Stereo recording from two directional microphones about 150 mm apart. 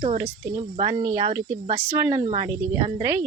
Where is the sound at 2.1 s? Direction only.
40° right (ahead or behind).